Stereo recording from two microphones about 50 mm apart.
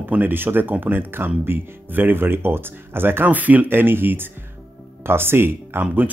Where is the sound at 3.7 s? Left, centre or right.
Right.